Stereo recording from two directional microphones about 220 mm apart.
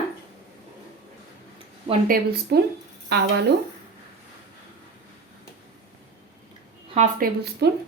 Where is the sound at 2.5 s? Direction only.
45° right (ahead or behind).